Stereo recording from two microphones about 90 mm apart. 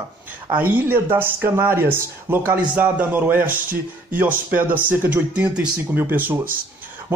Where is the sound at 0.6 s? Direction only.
20° right (ahead or behind).